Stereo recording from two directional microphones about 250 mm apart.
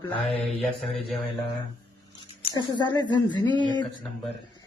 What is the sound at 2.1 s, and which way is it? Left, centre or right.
Speech, centre.